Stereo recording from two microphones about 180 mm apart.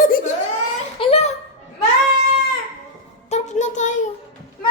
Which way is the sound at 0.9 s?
30° left (ahead or behind).